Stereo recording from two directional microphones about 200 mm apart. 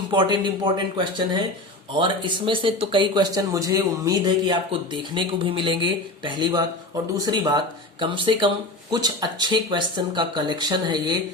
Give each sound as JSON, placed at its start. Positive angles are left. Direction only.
{"t": 0.1, "sound": "speech", "side_deg": -25}